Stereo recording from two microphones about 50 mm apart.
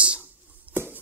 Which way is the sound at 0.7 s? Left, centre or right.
Right.